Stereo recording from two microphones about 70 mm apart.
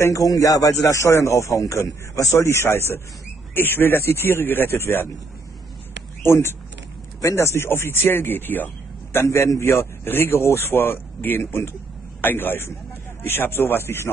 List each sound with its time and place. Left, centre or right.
0.1 s speech: left
2.3 s speech: left
3.5 s speech: left
6.2 s speech: left
9.1 s speech: left
10.0 s a man's voice: left